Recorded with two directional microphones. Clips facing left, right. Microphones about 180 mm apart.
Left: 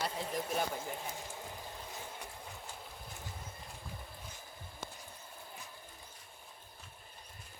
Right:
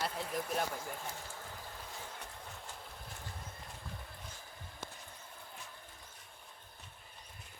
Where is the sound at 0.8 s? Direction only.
20° left (ahead or behind).